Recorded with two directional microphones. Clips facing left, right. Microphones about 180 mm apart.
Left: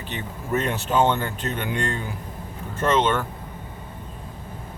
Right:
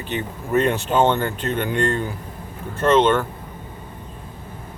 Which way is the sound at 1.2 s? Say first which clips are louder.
Right 5 dB; 50° right (ahead or behind).